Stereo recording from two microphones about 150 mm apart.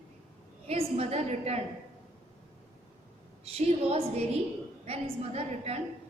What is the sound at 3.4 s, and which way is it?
A woman's voice, 40° right (ahead or behind).